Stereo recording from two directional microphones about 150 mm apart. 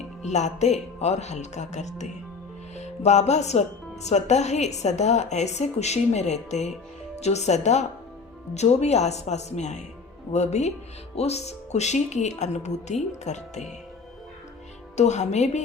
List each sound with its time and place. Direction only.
0.2 s speech: 50° left (ahead or behind)
14.9 s speech: 50° left (ahead or behind)